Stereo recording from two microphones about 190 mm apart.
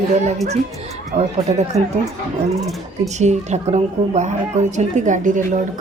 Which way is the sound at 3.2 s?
35° right (ahead or behind).